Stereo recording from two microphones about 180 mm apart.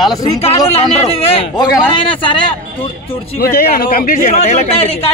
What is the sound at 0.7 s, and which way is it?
A man's voice, 35° left (ahead or behind).